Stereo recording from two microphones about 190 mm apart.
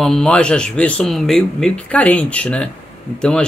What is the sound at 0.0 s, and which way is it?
Speech, 5° left (ahead or behind).